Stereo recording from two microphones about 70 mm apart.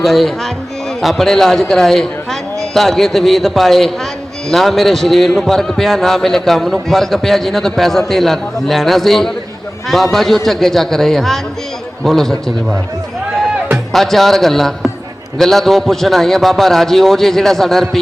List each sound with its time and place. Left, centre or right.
0.0 s a man's voice: centre
13.9 s a man's voice: centre